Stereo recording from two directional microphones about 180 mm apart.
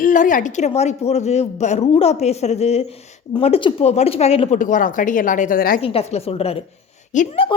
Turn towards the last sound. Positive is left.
turn(degrees=40)  # may be behind; listen again after turning